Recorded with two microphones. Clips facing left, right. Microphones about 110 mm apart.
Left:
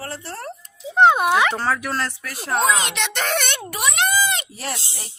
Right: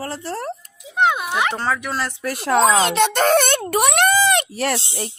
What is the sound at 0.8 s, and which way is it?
Speech, 30° left (ahead or behind).